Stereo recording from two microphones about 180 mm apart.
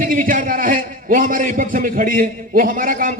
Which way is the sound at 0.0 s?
50° right (ahead or behind).